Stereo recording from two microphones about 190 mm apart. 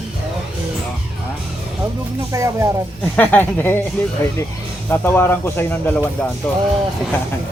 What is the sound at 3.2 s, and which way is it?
Speech, 10° left (ahead or behind).